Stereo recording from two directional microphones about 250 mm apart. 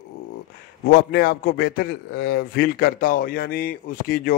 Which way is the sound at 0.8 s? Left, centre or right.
Left.